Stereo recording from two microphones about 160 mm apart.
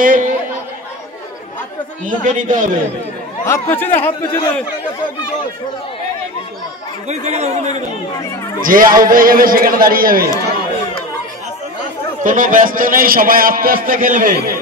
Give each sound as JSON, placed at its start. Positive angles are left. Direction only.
{"t": 0.0, "sound": "chatter", "side_deg": -55}
{"t": 2.0, "sound": "a man's voice", "side_deg": -55}
{"t": 3.4, "sound": "speech", "side_deg": 15}
{"t": 7.1, "sound": "speech", "side_deg": -45}
{"t": 8.5, "sound": "a man's voice", "side_deg": -60}
{"t": 12.2, "sound": "a man's voice", "side_deg": -55}